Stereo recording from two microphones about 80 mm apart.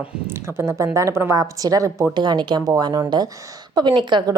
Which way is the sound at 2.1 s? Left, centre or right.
Right.